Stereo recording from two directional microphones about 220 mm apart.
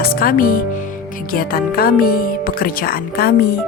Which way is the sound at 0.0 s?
40° left (ahead or behind).